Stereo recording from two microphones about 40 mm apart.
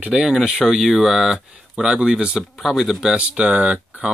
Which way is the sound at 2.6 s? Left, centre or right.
Centre.